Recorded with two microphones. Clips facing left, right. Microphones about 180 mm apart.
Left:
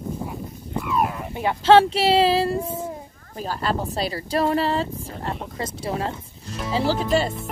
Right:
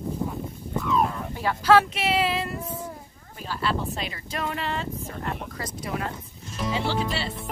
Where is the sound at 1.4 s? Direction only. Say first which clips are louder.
Left 4 dB; 25° left (ahead or behind).